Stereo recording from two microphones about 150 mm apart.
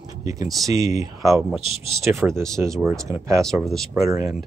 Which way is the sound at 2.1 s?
10° right (ahead or behind).